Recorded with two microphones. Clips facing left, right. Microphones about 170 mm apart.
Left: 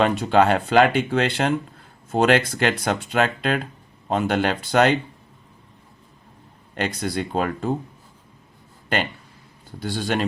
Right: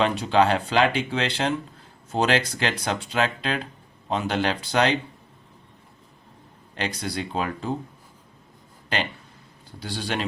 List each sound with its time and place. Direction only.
0.0 s speech: 50° left (ahead or behind)
6.7 s speech: 50° left (ahead or behind)
9.8 s speech: 50° left (ahead or behind)